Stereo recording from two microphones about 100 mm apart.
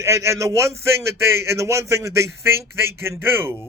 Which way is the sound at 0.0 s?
30° right (ahead or behind).